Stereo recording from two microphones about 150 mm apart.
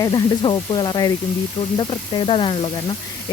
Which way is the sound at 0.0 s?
25° left (ahead or behind).